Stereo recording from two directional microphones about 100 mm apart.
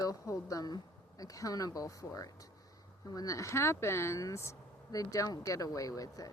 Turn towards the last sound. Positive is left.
turn(degrees=35)  # may be behind; listen again after turning